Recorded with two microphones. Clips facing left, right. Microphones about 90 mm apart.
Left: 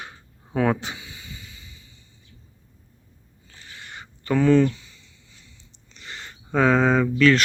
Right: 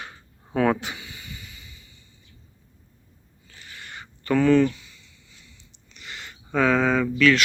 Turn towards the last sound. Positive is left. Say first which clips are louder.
# left 2 dB
turn(degrees=35)  # may be behind; listen again after turning